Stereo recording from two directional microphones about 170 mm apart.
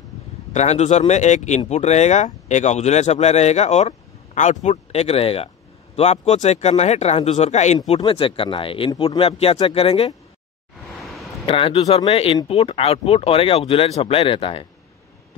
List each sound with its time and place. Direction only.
0.5 s speech: 40° left (ahead or behind)
11.0 s a sound: centre (ahead or behind)
11.4 s speech: 35° left (ahead or behind)